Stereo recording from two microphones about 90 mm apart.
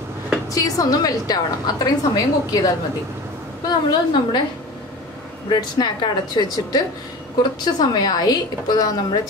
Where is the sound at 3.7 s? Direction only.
50° left (ahead or behind).